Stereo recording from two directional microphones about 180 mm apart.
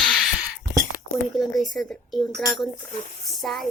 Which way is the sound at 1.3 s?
Centre (ahead or behind).